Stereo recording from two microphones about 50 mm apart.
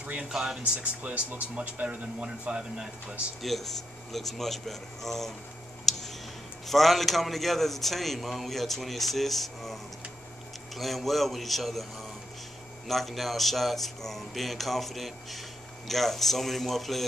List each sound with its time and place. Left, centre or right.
0.0 s speech: right
0.3 s speech: centre
0.6 s speech: right
3.4 s a man's voice: centre
5.9 s a sound: centre
6.6 s a man's voice: centre